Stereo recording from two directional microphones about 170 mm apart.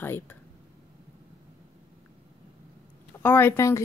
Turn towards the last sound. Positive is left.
turn(degrees=15)  # may be behind; listen again after turning